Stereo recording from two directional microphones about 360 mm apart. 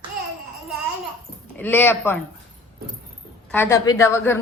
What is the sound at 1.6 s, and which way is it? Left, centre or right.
Speech, centre.